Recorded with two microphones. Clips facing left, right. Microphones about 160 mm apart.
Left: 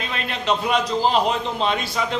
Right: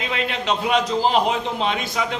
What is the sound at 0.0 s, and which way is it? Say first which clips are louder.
A man's voice: right 2 dB; 15° right (ahead or behind).